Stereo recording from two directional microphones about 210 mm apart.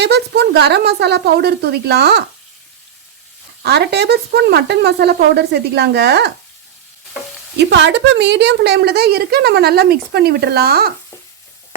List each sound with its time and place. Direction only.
0.0 s a woman's voice: 55° right (ahead or behind)
3.6 s a woman's voice: 50° right (ahead or behind)
7.5 s a woman's voice: 55° right (ahead or behind)